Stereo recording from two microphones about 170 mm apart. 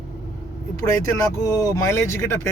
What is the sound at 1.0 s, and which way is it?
Speech, 20° left (ahead or behind).